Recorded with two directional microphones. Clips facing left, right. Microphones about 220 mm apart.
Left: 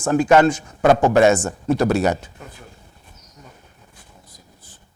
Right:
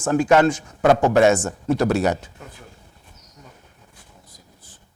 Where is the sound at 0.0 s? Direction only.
15° left (ahead or behind).